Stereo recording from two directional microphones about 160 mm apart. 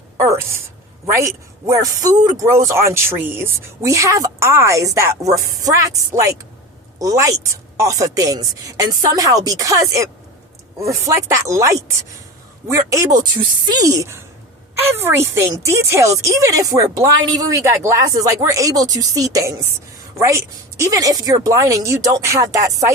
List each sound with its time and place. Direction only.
0.2 s a woman's voice: 15° right (ahead or behind)